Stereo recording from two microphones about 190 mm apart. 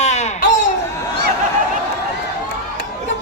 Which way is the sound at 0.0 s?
35° left (ahead or behind).